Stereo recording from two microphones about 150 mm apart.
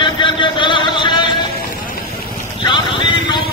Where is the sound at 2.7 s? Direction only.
35° left (ahead or behind).